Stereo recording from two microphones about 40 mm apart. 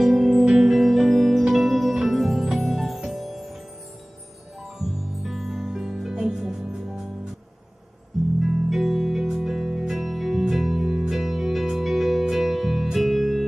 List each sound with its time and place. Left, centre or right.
0.0 s music: centre
0.5 s music: centre
0.7 s music: centre
4.7 s music: centre
8.5 s music: centre